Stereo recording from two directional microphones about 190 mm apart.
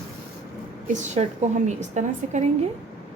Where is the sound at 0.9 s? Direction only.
40° right (ahead or behind).